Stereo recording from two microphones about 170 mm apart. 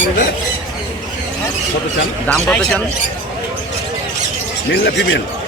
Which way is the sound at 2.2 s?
5° left (ahead or behind).